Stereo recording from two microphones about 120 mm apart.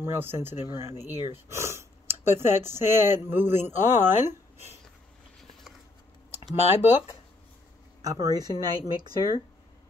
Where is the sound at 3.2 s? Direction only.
20° right (ahead or behind).